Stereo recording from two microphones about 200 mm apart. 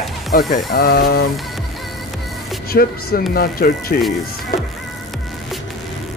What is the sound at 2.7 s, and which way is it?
Speech, 50° left (ahead or behind).